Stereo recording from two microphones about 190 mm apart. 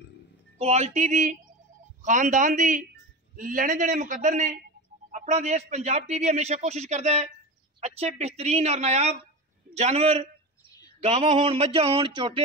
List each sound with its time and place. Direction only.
0.6 s a man's voice: 35° right (ahead or behind)